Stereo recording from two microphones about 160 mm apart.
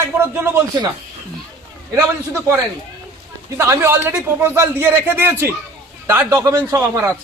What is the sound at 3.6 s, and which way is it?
A man's voice, 15° right (ahead or behind).